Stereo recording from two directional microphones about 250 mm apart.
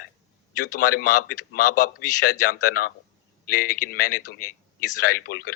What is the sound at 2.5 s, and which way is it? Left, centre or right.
Speech, left.